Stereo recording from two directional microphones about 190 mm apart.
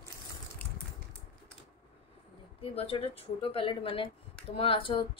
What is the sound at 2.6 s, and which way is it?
A woman's voice, 30° left (ahead or behind).